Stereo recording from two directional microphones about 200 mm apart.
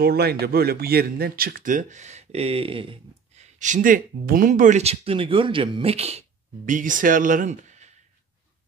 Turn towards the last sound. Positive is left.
turn(degrees=-40)  # may be behind; listen again after turning